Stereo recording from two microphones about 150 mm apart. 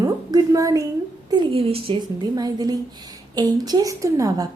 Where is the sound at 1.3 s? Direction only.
40° right (ahead or behind).